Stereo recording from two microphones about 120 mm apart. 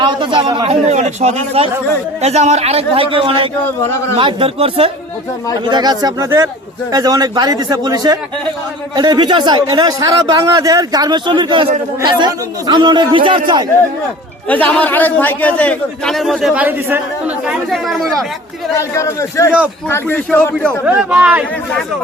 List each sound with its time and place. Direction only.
0.0 s a man's voice: 40° right (ahead or behind)
5.6 s a man's voice: 35° right (ahead or behind)
14.4 s a man's voice: 15° left (ahead or behind)
16.6 s speech: 15° right (ahead or behind)
17.7 s speech: centre (ahead or behind)
18.8 s a man's voice: 25° left (ahead or behind)
19.9 s a man's voice: 15° left (ahead or behind)
20.8 s speech: 10° right (ahead or behind)